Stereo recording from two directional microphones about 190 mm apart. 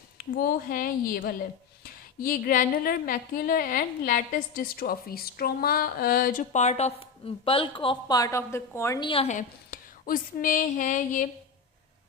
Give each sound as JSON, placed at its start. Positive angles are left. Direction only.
{"t": 0.2, "sound": "speech", "side_deg": 50}
{"t": 9.0, "sound": "speech", "side_deg": 30}